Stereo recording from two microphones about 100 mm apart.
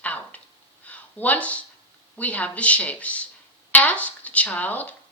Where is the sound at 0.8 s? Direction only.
15° left (ahead or behind).